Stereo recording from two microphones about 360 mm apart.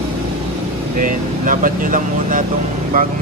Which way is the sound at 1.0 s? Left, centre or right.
Right.